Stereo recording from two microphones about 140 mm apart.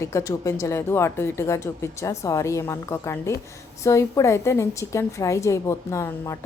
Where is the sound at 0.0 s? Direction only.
20° left (ahead or behind).